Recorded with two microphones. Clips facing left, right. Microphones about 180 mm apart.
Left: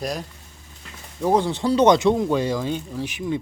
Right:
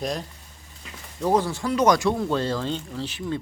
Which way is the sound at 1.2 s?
15° left (ahead or behind).